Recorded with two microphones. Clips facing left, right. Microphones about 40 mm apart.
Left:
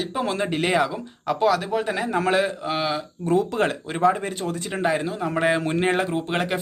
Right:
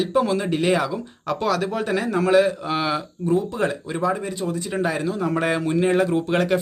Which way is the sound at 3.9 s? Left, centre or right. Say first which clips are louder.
Left 2 dB; left.